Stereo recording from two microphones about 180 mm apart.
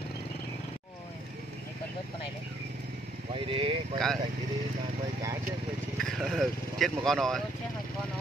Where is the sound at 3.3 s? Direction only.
30° right (ahead or behind).